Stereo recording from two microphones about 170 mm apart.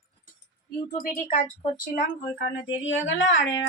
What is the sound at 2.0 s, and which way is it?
Speech, 80° left.